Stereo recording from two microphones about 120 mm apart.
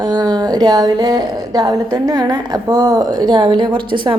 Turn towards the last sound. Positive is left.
turn(degrees=-45)  # may be behind; listen again after turning